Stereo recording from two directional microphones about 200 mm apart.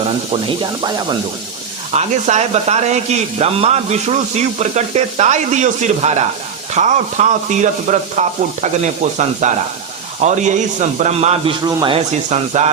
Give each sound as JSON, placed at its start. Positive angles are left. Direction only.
{"t": 0.3, "sound": "speech", "side_deg": -25}
{"t": 2.0, "sound": "speech", "side_deg": -35}